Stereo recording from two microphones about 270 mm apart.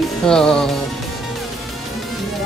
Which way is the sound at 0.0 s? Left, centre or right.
Centre.